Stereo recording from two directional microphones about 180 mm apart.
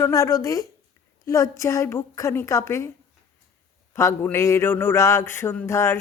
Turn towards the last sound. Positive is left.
turn(degrees=15)  # may be behind; listen again after turning